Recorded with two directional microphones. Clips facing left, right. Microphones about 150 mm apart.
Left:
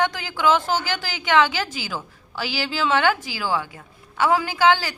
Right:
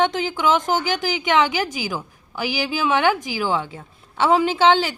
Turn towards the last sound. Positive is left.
turn(degrees=-25)  # may be behind; listen again after turning